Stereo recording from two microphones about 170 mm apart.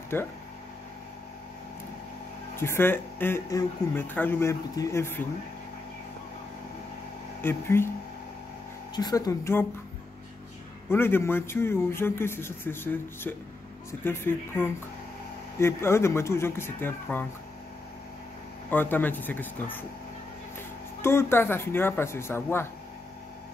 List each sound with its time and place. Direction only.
0.1 s speech: 10° left (ahead or behind)
2.5 s speech: 15° left (ahead or behind)
7.4 s speech: 15° left (ahead or behind)
8.9 s speech: 25° left (ahead or behind)
10.9 s speech: 15° left (ahead or behind)
18.7 s speech: 10° left (ahead or behind)
21.0 s speech: 15° left (ahead or behind)